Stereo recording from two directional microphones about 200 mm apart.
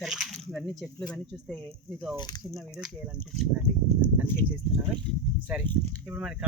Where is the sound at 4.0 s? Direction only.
5° right (ahead or behind).